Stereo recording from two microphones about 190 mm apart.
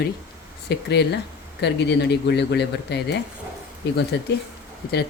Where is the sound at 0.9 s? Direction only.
60° left (ahead or behind).